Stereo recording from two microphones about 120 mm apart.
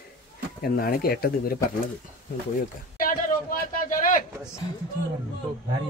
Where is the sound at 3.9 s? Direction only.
90° left.